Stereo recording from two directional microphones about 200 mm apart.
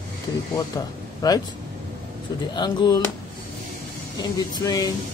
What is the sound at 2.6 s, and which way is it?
Speech, 20° left (ahead or behind).